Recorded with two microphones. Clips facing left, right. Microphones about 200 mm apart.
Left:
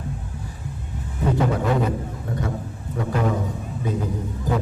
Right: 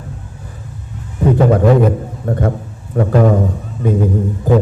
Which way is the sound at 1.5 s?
55° right (ahead or behind).